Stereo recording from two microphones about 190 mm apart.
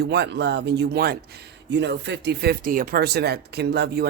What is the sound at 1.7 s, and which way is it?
Speech, 65° right (ahead or behind).